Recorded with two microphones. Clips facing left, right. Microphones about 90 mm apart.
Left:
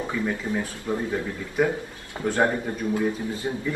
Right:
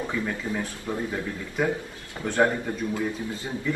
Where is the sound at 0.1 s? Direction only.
15° left (ahead or behind).